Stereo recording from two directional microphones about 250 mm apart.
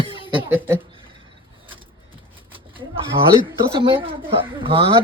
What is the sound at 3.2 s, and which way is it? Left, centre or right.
Speech, right.